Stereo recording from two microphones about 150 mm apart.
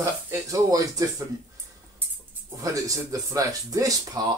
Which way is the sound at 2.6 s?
25° right (ahead or behind).